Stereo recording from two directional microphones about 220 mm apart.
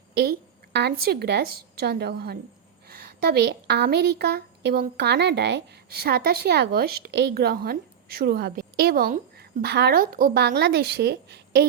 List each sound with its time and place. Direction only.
0.1 s a woman's voice: 45° right (ahead or behind)